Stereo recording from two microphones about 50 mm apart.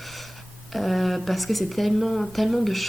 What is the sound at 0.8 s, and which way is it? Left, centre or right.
Speech, centre.